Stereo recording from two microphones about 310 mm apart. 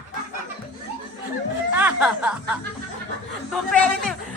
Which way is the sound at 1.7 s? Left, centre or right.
Centre.